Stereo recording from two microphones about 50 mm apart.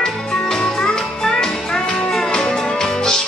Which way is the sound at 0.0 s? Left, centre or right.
Centre.